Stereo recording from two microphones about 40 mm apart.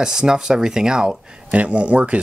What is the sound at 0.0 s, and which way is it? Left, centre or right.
Speech, centre.